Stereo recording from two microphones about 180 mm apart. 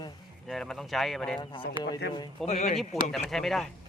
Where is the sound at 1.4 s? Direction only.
25° left (ahead or behind).